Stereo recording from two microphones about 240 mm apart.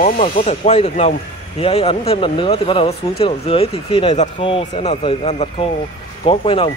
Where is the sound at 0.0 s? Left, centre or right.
Left.